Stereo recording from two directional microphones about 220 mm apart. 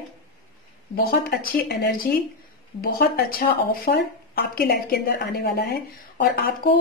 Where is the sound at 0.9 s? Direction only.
45° left (ahead or behind).